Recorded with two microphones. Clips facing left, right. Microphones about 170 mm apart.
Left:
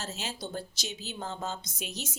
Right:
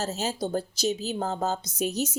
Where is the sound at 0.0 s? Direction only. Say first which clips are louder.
Right 9 dB; 40° right (ahead or behind).